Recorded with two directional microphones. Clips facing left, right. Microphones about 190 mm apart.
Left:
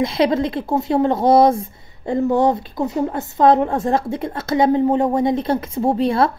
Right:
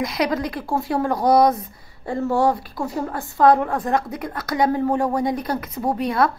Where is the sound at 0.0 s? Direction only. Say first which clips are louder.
Left 5 dB; 25° left (ahead or behind).